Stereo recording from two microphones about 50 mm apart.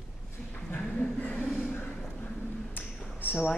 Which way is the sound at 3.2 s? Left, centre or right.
Left.